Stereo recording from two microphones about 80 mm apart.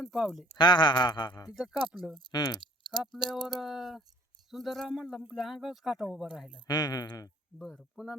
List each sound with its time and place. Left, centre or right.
0.0 s speech: centre
0.5 s speech: left
1.5 s speech: centre
2.3 s speech: left
3.1 s speech: centre
6.7 s speech: left
7.6 s speech: centre